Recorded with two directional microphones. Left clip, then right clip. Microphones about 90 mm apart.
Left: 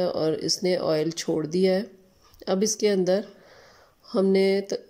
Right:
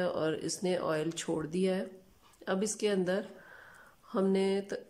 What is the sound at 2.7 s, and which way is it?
Speech, 30° left (ahead or behind).